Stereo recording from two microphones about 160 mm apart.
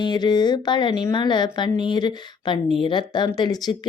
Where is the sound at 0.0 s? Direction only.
25° left (ahead or behind).